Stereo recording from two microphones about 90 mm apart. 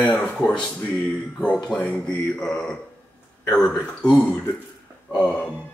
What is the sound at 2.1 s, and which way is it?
Speech, 10° left (ahead or behind).